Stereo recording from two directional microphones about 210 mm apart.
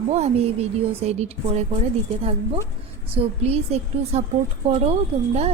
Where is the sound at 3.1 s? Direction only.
30° right (ahead or behind).